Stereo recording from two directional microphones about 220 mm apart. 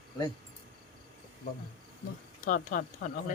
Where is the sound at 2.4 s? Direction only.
35° left (ahead or behind).